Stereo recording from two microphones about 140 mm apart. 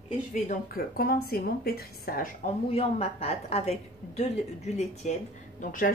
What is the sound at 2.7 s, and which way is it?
A woman's voice, 45° left (ahead or behind).